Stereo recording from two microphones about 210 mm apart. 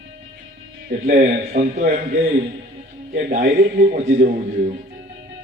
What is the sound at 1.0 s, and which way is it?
A man's voice, 40° right (ahead or behind).